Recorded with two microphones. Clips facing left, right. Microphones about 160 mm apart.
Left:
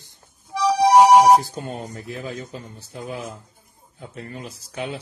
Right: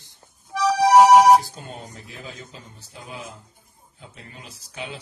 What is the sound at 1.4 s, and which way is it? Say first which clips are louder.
Speech: left 7 dB; 55° left (ahead or behind).